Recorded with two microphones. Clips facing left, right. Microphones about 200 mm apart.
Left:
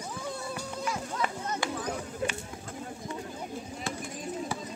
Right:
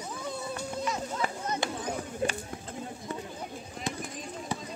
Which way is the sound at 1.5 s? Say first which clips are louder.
Even; 25° right (ahead or behind).